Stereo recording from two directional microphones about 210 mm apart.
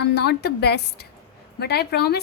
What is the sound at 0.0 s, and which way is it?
A woman's voice, 50° left (ahead or behind).